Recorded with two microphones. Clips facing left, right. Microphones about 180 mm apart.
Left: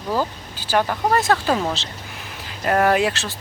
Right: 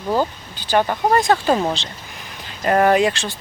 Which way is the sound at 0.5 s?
5° left (ahead or behind).